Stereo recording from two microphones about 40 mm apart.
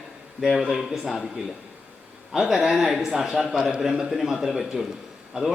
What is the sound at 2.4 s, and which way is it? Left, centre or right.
A man's voice, centre.